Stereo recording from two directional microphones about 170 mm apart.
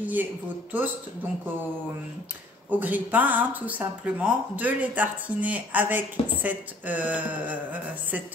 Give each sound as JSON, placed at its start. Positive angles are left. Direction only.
{"t": 0.0, "sound": "speech", "side_deg": -10}
{"t": 2.7, "sound": "speech", "side_deg": -10}